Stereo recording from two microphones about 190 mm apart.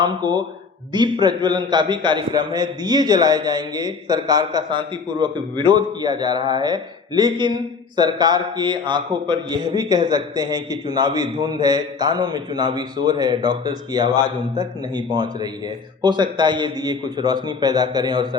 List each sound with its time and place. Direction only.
0.0 s a man's voice: 25° right (ahead or behind)